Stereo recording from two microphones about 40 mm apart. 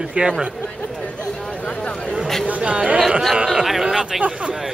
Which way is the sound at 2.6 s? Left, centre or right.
Right.